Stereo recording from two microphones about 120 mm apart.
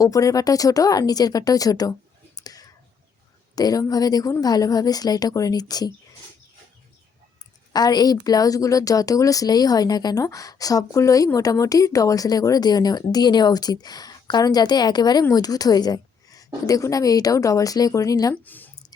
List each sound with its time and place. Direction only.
0.0 s speech: 30° left (ahead or behind)
7.7 s speech: 35° left (ahead or behind)
18.4 s a sound: 15° left (ahead or behind)